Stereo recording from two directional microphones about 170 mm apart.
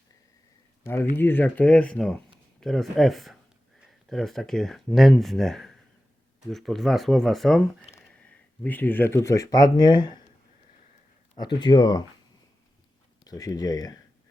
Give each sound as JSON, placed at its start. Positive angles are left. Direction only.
{"t": 1.1, "sound": "speech", "side_deg": 10}
{"t": 11.3, "sound": "speech", "side_deg": 25}
{"t": 13.2, "sound": "speech", "side_deg": 20}